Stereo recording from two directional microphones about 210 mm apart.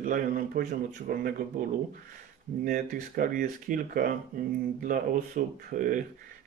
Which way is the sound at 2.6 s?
40° right (ahead or behind).